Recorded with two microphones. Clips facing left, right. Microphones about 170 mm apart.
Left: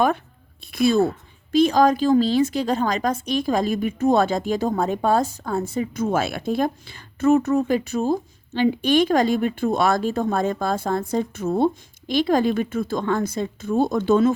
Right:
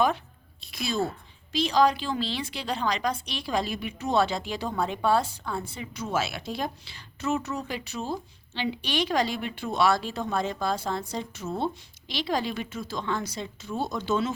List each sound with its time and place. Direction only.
0.7 s a woman's voice: 55° left (ahead or behind)